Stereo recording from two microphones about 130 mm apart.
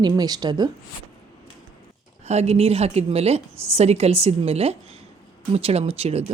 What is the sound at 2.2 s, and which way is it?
A woman's voice, 55° right (ahead or behind).